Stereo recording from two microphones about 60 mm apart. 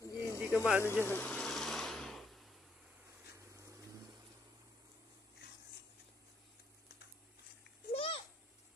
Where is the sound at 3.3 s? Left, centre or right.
Right.